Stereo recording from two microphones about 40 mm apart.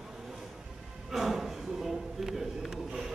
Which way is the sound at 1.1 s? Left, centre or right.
Centre.